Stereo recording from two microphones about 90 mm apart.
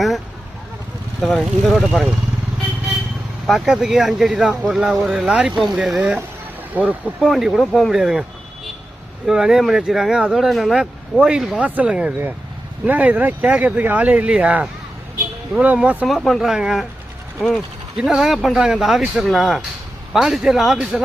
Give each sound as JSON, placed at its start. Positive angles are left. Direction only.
{"t": 1.2, "sound": "speech", "side_deg": 0}
{"t": 3.4, "sound": "speech", "side_deg": 0}
{"t": 6.7, "sound": "speech", "side_deg": -15}
{"t": 7.2, "sound": "speech", "side_deg": -5}
{"t": 7.9, "sound": "speech", "side_deg": -5}
{"t": 9.2, "sound": "speech", "side_deg": -5}
{"t": 15.6, "sound": "speech", "side_deg": -15}
{"t": 16.0, "sound": "speech", "side_deg": 0}
{"t": 17.9, "sound": "speech", "side_deg": -5}